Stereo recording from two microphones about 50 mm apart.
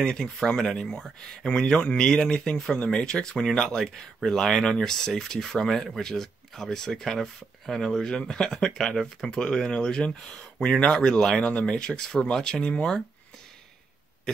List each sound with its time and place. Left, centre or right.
0.0 s speech: centre
1.8 s speech: left
2.0 s speech: centre
3.6 s speech: centre; by 10.9 s left
10.9 s speech: centre